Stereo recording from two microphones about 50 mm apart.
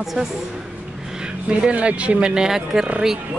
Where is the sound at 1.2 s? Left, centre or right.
Right.